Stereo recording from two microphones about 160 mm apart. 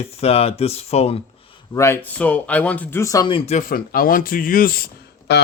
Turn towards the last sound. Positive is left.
turn(degrees=80)